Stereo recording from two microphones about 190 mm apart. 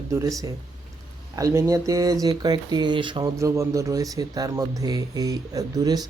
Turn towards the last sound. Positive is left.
turn(degrees=-20)  # may be behind; listen again after turning